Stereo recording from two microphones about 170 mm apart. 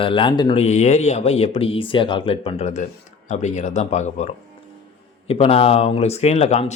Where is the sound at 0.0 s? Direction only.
30° left (ahead or behind).